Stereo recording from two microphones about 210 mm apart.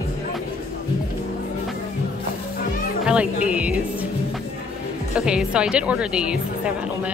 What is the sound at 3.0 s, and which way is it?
Speech, 5° right (ahead or behind).